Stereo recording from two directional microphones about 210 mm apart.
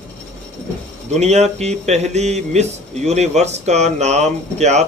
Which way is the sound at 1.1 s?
30° right (ahead or behind).